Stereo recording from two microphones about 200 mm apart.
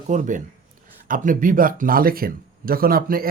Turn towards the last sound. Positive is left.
turn(degrees=-45)  # may be behind; listen again after turning